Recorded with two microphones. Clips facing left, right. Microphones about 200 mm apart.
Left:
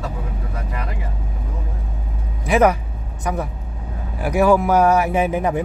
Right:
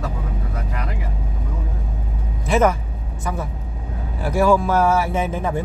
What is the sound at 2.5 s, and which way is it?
A man's voice, 15° left (ahead or behind).